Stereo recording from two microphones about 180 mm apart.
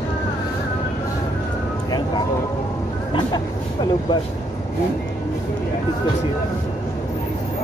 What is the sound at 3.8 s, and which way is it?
Vehicle, 25° left (ahead or behind).